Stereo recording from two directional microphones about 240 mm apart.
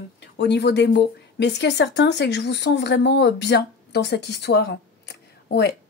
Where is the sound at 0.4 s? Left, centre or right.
Left.